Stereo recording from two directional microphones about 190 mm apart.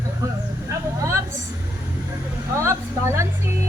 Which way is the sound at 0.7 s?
15° right (ahead or behind).